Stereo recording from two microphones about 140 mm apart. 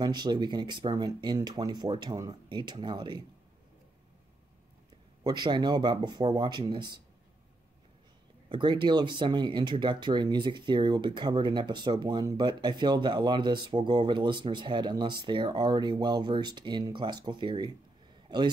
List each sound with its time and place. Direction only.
0.0 s speech: 30° right (ahead or behind)
5.2 s speech: 30° right (ahead or behind)
8.5 s speech: 35° right (ahead or behind)